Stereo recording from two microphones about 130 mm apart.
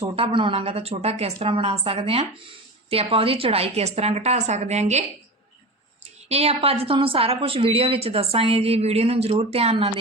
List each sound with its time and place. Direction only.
0.0 s a woman's voice: 45° right (ahead or behind); by 5.0 s 60° right (ahead or behind)
6.2 s a woman's voice: 50° right (ahead or behind)